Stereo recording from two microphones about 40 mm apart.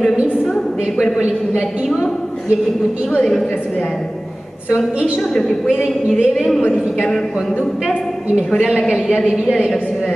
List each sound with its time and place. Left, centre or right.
3.2 s a woman's voice: centre
5.3 s a woman's voice: centre
5.7 s speech: right
6.3 s a woman's voice: centre
8.5 s a woman's voice: centre